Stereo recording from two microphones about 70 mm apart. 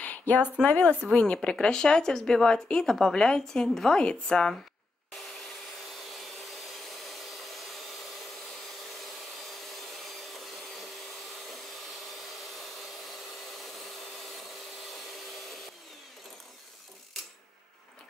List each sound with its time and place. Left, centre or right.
0.3 s speech: left
9.5 s vacuum cleaner: centre